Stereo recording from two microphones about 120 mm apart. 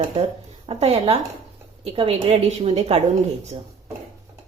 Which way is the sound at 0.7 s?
55° right (ahead or behind).